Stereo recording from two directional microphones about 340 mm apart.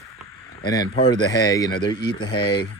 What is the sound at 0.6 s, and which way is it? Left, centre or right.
Speech, centre.